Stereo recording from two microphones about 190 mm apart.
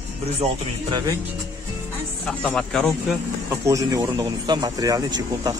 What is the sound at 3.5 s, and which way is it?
Speech, 15° right (ahead or behind).